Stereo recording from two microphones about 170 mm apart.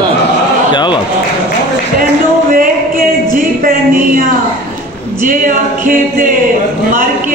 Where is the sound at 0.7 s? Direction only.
25° left (ahead or behind).